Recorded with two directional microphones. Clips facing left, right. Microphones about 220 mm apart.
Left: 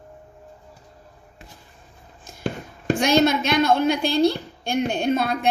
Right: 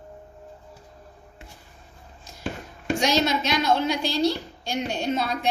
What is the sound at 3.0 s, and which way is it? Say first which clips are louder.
A woman's voice: left 5 dB; 55° left (ahead or behind).